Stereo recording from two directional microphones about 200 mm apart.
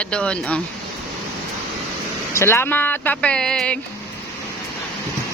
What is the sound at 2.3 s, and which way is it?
Speech, 15° left (ahead or behind).